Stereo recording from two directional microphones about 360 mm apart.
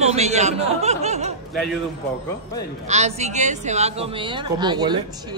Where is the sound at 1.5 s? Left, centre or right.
Centre.